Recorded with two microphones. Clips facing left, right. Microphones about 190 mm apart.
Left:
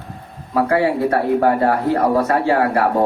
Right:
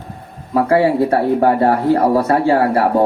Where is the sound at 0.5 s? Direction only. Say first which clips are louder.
Right 3 dB; 30° right (ahead or behind).